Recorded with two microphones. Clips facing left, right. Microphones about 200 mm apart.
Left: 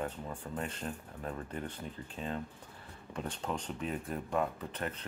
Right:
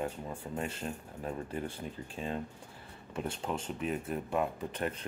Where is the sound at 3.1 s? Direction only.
10° right (ahead or behind).